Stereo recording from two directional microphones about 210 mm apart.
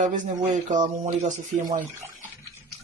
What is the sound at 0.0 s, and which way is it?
Speech, 35° right (ahead or behind).